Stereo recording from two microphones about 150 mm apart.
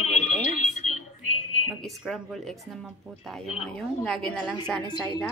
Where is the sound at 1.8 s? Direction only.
Centre (ahead or behind).